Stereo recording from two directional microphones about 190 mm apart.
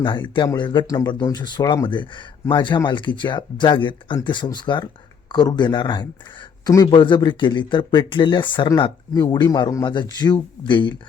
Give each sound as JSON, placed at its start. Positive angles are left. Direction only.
{"t": 0.3, "sound": "speech", "side_deg": 25}